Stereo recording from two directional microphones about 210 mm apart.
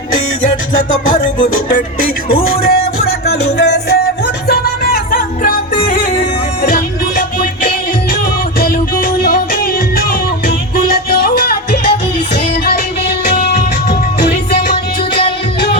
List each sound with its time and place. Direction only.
0.8 s music: 40° left (ahead or behind)
6.6 s music: 45° left (ahead or behind)